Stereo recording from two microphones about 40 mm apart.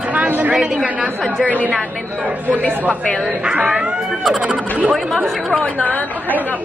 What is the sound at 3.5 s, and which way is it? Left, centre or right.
Speech, right.